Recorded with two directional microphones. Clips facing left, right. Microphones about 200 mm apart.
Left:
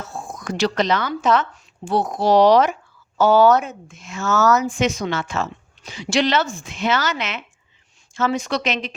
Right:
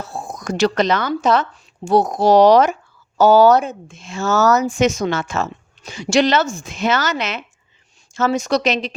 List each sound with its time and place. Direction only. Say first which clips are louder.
0.0 s speech: right 3 dB; 35° right (ahead or behind)